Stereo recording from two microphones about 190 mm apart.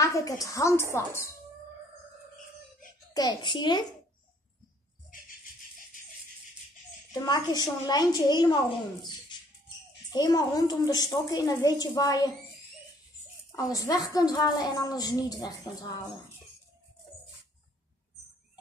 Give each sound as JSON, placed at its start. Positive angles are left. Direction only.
{"t": 0.0, "sound": "a woman's voice", "side_deg": 20}
{"t": 3.1, "sound": "a woman's voice", "side_deg": 20}
{"t": 7.2, "sound": "a woman's voice", "side_deg": 20}
{"t": 10.1, "sound": "a woman's voice", "side_deg": 20}
{"t": 13.6, "sound": "a woman's voice", "side_deg": 20}